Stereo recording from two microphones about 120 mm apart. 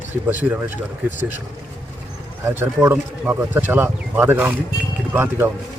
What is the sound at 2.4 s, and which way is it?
Speech, 15° right (ahead or behind).